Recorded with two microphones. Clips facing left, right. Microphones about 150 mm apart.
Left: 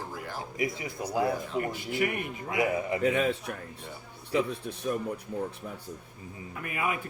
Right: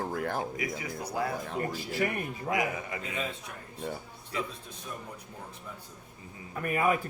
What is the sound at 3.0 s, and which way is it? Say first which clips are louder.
Speech: left 10 dB; 65° left (ahead or behind).